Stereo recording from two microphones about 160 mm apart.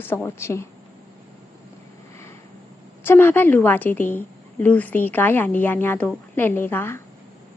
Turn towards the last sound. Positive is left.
turn(degrees=15)  # may be behind; listen again after turning